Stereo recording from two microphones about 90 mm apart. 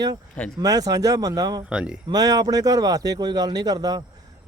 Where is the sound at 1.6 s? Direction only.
10° right (ahead or behind).